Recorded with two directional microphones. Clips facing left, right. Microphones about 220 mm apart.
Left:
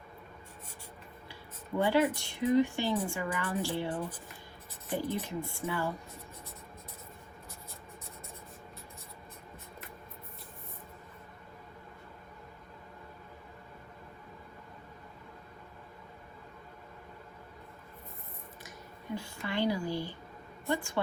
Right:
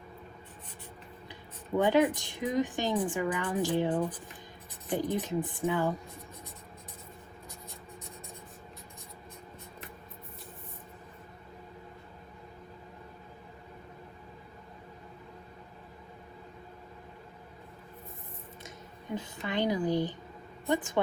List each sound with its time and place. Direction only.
1.8 s a woman's voice: 15° right (ahead or behind)
19.1 s a sound: 20° right (ahead or behind)
20.7 s a woman's voice: 20° right (ahead or behind)